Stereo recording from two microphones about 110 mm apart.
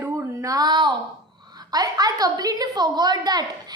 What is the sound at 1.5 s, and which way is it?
A woman's voice, 35° right (ahead or behind).